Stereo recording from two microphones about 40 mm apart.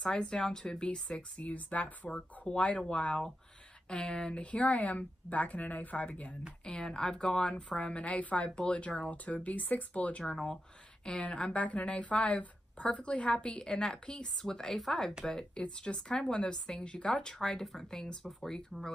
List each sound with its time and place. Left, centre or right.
0.0 s speech: left
1.5 s speech: left
2.0 s speech: left
6.6 s speech: left
7.9 s speech: left
10.2 s a woman's voice: centre
11.1 s speech: left
13.6 s a woman's voice: centre
15.5 s speech: left